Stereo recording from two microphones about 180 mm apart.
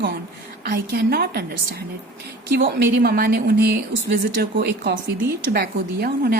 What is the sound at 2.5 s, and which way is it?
Speech, 65° right (ahead or behind).